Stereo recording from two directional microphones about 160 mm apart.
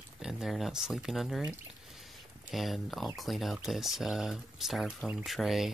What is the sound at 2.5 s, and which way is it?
Speech, centre (ahead or behind).